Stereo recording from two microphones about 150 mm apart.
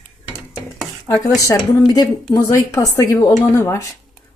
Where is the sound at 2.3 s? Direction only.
20° left (ahead or behind).